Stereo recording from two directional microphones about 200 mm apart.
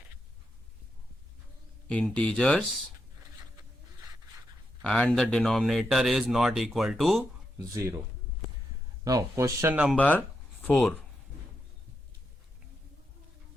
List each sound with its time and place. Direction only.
1.9 s speech: 5° left (ahead or behind)
4.8 s speech: 5° left (ahead or behind)
7.7 s speech: 15° right (ahead or behind)
9.0 s speech: 15° right (ahead or behind)
9.9 s speech: 10° left (ahead or behind)